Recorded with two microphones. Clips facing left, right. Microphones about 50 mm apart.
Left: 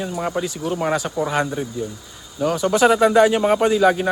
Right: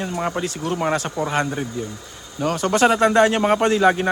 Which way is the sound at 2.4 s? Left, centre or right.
Centre.